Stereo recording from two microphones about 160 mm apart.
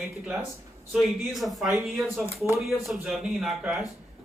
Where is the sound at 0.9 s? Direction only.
Centre (ahead or behind).